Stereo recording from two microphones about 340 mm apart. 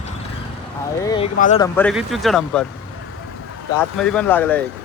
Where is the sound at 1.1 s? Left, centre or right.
Centre.